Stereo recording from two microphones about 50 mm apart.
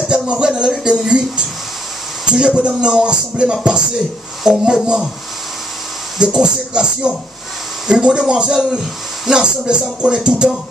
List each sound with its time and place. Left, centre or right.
0.0 s speech: centre
6.1 s speech: centre